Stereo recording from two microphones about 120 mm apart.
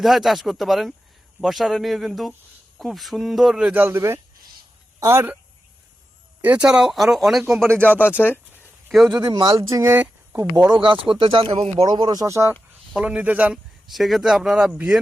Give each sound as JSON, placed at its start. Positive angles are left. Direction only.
{"t": 0.0, "sound": "a man's voice", "side_deg": 0}
{"t": 6.4, "sound": "speech", "side_deg": -15}
{"t": 8.0, "sound": "speech", "side_deg": 15}
{"t": 8.9, "sound": "speech", "side_deg": 0}
{"t": 9.1, "sound": "speech", "side_deg": -40}
{"t": 9.5, "sound": "speech", "side_deg": -30}
{"t": 9.9, "sound": "speech", "side_deg": -20}
{"t": 10.8, "sound": "speech", "side_deg": -45}
{"t": 11.9, "sound": "speech", "side_deg": -40}
{"t": 12.9, "sound": "a man's voice", "side_deg": -10}
{"t": 13.9, "sound": "a man's voice", "side_deg": 0}